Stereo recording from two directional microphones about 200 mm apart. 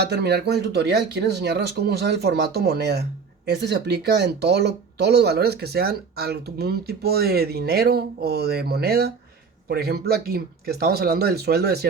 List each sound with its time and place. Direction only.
0.0 s speech: 55° right (ahead or behind)